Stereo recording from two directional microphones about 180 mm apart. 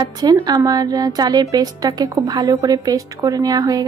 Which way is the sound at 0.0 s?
20° right (ahead or behind).